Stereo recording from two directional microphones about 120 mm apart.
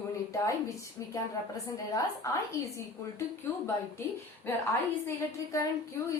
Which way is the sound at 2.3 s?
25° left (ahead or behind).